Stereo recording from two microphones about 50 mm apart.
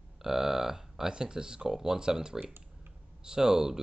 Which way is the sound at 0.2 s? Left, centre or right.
Centre.